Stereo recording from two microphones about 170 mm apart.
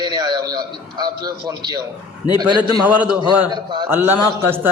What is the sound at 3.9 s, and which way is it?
Speech, 10° right (ahead or behind).